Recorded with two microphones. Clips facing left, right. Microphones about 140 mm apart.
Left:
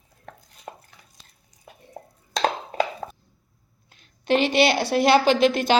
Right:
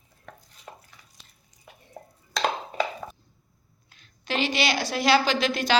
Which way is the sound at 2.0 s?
45° left (ahead or behind).